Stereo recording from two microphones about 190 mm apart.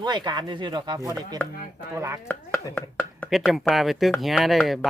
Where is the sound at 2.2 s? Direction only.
10° left (ahead or behind).